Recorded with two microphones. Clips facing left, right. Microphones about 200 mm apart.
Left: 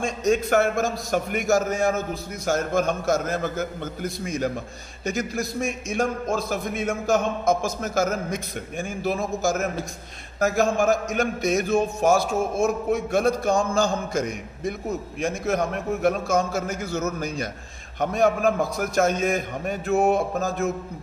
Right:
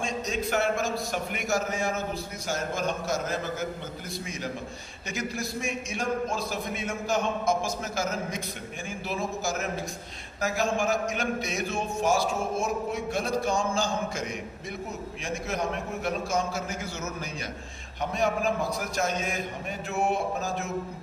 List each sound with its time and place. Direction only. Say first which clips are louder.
0.0 s a man's voice: left 8 dB; 50° left (ahead or behind)